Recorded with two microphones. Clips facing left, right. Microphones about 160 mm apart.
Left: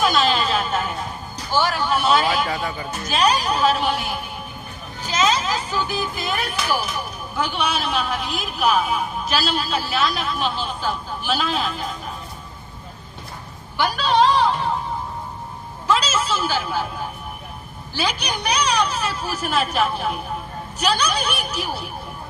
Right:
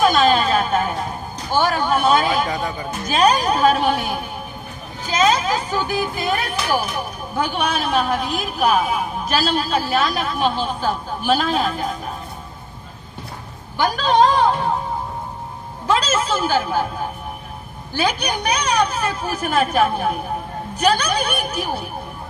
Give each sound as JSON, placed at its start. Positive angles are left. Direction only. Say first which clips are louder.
{"t": 0.0, "sound": "a sound", "louder": "right 4 dB", "side_deg": -50}
{"t": 1.5, "sound": "a man's voice", "louder": "right 2 dB", "side_deg": -50}
{"t": 2.5, "sound": "speech", "louder": "right 2 dB", "side_deg": -20}
{"t": 3.1, "sound": "a man's voice", "louder": "right 4 dB", "side_deg": -50}
{"t": 13.7, "sound": "speech", "louder": "right 2 dB", "side_deg": -45}
{"t": 15.9, "sound": "a man's voice", "louder": "right 2 dB", "side_deg": -50}
{"t": 17.9, "sound": "a man's voice", "louder": "right 4 dB", "side_deg": -50}